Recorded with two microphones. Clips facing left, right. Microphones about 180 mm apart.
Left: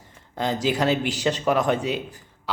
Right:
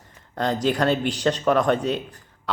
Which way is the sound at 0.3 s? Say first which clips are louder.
Right 1 dB; 5° left (ahead or behind).